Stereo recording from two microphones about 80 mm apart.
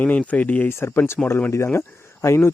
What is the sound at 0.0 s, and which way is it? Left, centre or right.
Speech, centre.